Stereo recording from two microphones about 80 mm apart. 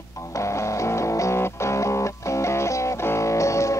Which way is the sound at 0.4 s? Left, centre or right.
Left.